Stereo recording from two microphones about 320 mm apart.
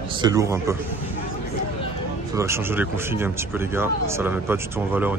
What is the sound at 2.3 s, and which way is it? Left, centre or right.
Speech, centre.